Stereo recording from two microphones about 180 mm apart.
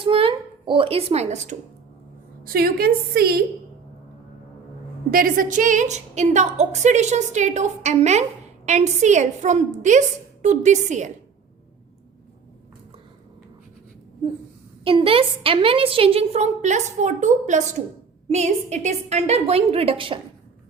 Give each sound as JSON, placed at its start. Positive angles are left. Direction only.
{"t": 0.0, "sound": "a sound", "side_deg": -30}
{"t": 2.4, "sound": "a woman's voice", "side_deg": -55}
{"t": 5.1, "sound": "a woman's voice", "side_deg": -50}
{"t": 14.8, "sound": "a woman's voice", "side_deg": -30}